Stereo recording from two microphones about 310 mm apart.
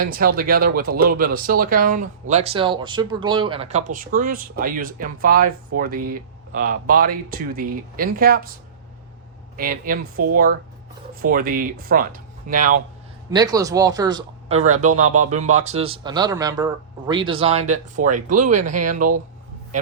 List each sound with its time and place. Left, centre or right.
0.0 s speech: right
9.6 s speech: right
13.3 s speech: centre
15.0 s speech: right
15.8 s speech: centre
18.0 s speech: right
18.5 s a man's voice: right